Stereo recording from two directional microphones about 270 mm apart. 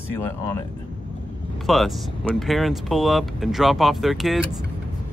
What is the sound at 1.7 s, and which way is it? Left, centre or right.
Speech, centre.